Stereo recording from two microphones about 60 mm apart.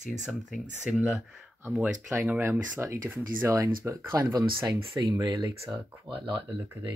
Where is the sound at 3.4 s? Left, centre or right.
Right.